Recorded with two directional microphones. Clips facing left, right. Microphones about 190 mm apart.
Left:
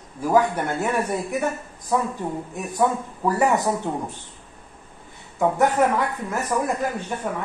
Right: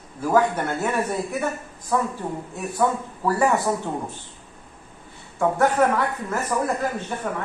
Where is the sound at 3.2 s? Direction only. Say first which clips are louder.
Even; 15° left (ahead or behind).